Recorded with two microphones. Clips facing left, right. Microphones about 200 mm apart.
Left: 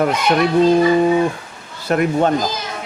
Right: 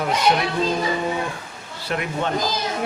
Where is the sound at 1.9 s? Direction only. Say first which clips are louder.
Left 9 dB; 45° left (ahead or behind).